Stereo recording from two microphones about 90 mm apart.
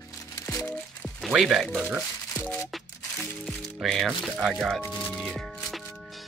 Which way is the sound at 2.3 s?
15° left (ahead or behind).